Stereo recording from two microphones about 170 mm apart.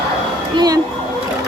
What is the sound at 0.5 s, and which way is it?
Speech, 25° right (ahead or behind).